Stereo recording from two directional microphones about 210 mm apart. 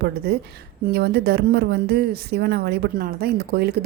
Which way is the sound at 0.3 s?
50° right (ahead or behind).